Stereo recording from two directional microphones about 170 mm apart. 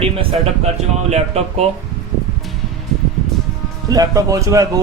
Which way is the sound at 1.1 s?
40° right (ahead or behind).